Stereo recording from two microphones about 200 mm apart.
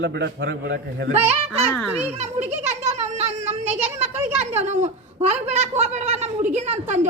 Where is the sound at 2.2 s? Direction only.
35° right (ahead or behind).